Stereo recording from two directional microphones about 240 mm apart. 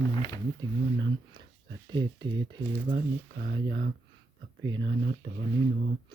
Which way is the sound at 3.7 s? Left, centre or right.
Right.